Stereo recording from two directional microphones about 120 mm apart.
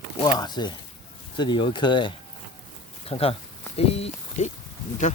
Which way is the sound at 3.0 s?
55° left (ahead or behind).